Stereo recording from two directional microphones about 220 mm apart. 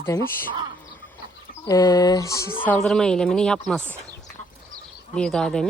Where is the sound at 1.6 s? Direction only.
15° left (ahead or behind).